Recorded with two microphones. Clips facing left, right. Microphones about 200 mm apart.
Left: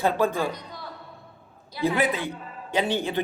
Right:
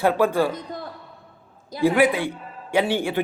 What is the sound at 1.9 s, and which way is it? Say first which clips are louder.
Speech: right 6 dB; 15° right (ahead or behind).